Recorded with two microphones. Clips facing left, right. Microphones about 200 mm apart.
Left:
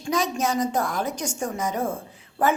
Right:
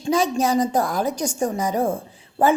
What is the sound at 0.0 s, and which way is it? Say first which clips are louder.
A woman's voice: right 5 dB; 30° right (ahead or behind).